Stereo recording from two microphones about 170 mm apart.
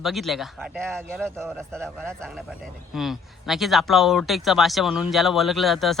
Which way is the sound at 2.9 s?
Centre (ahead or behind).